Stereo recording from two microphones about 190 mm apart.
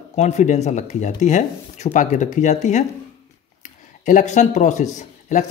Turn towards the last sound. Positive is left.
turn(degrees=40)  # may be behind; listen again after turning